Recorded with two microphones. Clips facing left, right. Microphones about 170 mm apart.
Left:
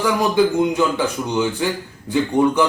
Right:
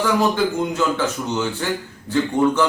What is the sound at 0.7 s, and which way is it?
Speech, 15° left (ahead or behind).